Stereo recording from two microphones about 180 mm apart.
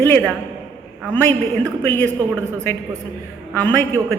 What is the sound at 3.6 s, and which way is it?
Speech, 10° left (ahead or behind).